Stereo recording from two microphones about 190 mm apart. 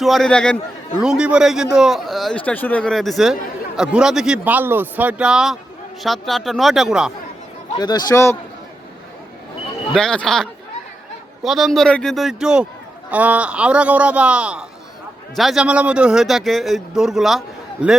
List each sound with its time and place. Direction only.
0.0 s a man's voice: centre (ahead or behind)
7.8 s a man's voice: 20° left (ahead or behind)
9.9 s a man's voice: 5° left (ahead or behind)